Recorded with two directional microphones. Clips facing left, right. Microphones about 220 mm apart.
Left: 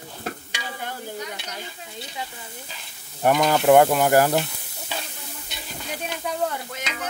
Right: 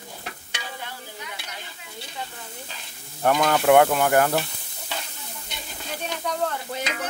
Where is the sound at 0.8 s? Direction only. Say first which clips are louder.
Left 6 dB; 40° left (ahead or behind).